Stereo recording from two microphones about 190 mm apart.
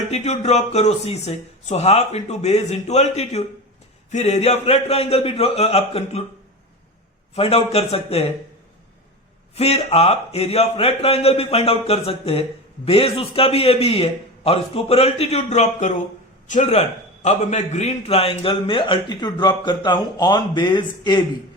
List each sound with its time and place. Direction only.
0.1 s a man's voice: 35° left (ahead or behind)
7.3 s a man's voice: 30° left (ahead or behind)
9.6 s a man's voice: 35° left (ahead or behind)